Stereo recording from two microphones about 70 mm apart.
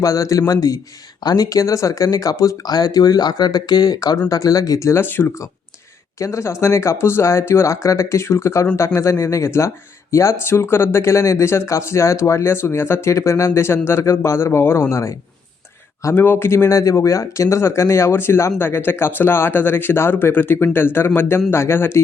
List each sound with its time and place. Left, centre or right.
0.0 s speech: left
1.2 s speech: left
5.0 s speech: left
6.1 s speech: left
16.1 s speech: left
16.6 s speech: left